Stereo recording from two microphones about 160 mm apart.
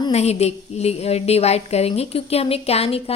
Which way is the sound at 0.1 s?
40° left (ahead or behind).